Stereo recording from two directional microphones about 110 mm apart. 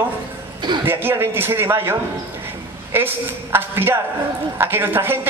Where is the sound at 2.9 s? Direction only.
20° right (ahead or behind).